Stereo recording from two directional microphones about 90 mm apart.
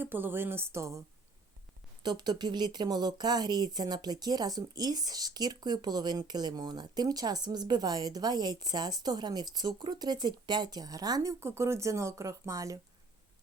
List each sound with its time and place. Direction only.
0.0 s speech: 20° right (ahead or behind)
2.0 s speech: 50° right (ahead or behind)